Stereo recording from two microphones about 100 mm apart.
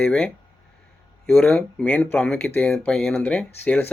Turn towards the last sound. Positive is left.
turn(degrees=15)  # may be behind; listen again after turning